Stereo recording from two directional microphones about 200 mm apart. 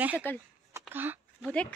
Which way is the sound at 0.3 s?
10° left (ahead or behind).